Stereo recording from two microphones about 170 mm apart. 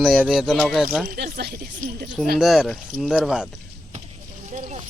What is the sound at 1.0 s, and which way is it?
Speech, 70° right (ahead or behind).